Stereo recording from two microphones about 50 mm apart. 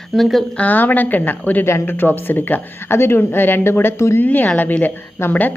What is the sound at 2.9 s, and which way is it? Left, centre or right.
A woman's voice, left.